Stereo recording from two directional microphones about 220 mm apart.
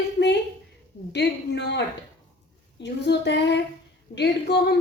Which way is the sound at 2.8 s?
50° left (ahead or behind).